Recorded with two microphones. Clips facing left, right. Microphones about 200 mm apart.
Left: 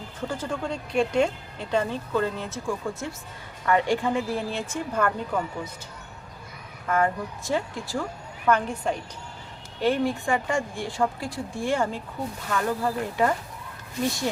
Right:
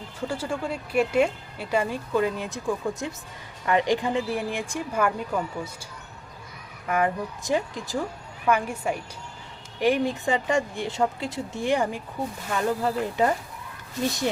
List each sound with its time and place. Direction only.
0.3 s speech: 10° right (ahead or behind)
6.8 s speech: 15° right (ahead or behind)